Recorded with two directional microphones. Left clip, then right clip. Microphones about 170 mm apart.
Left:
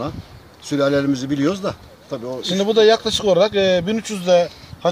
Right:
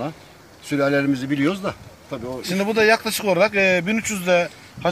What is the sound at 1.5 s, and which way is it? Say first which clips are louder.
Speech: left 3 dB; 25° left (ahead or behind).